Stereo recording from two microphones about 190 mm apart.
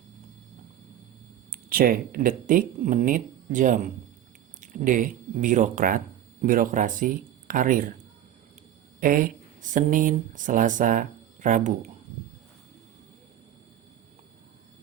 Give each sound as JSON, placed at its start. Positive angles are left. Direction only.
{"t": 1.7, "sound": "speech", "side_deg": -50}
{"t": 9.0, "sound": "speech", "side_deg": -45}